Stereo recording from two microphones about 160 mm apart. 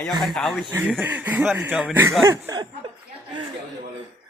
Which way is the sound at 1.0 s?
10° right (ahead or behind).